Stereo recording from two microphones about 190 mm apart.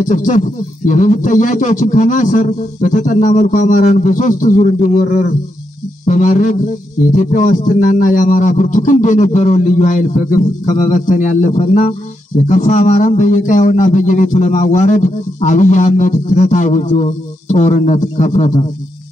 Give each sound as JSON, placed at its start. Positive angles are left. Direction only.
{"t": 0.0, "sound": "a man's voice", "side_deg": 40}